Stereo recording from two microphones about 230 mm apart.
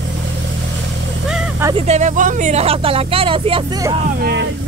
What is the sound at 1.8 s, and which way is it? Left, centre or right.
Speech, right.